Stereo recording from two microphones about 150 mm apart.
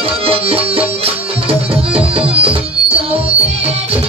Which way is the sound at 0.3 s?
40° right (ahead or behind).